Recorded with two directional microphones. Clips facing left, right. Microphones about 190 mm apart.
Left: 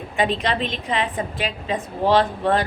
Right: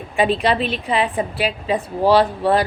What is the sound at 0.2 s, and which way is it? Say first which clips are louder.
A woman's voice: right 4 dB; 10° right (ahead or behind).